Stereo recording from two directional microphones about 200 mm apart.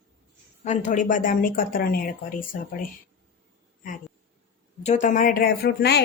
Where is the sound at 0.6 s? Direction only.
35° left (ahead or behind).